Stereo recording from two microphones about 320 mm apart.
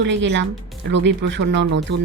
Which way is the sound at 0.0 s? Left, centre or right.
Right.